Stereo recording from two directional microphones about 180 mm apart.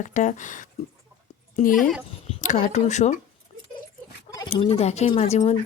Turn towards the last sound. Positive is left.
turn(degrees=35)  # may be behind; listen again after turning